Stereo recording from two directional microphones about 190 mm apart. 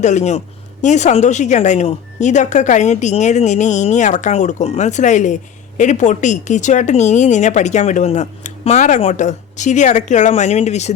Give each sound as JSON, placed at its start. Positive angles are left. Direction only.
{"t": 0.0, "sound": "a woman's voice", "side_deg": 40}